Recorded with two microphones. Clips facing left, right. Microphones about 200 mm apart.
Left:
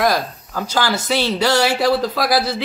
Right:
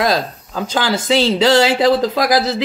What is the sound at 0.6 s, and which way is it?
Speech, 20° right (ahead or behind).